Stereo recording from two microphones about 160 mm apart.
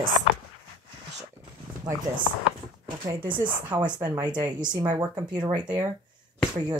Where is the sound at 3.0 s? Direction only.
30° right (ahead or behind).